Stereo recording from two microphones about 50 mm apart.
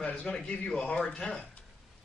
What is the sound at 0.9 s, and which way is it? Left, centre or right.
Speech, left.